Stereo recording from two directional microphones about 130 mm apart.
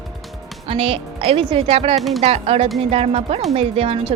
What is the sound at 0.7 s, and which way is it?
Speech, 45° right (ahead or behind).